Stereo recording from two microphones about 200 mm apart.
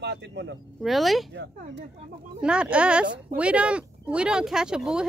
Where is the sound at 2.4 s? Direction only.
5° right (ahead or behind).